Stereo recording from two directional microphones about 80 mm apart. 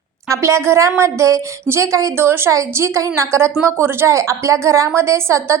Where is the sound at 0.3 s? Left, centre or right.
Right.